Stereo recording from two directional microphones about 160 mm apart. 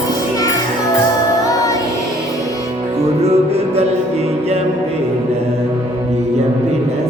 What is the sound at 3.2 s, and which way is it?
Music, 40° right (ahead or behind).